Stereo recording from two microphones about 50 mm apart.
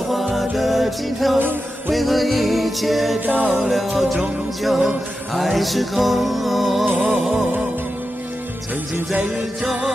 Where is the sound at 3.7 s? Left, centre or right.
Centre.